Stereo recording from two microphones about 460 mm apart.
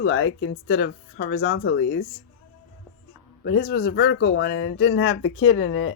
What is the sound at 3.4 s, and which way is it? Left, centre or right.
Speech, left.